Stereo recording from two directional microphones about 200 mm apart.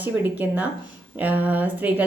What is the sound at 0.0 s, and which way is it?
Speech, 10° right (ahead or behind).